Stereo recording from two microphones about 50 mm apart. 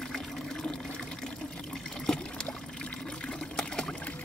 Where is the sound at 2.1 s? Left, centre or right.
Centre.